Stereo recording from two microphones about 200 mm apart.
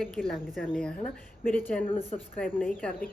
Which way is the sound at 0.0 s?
Centre (ahead or behind).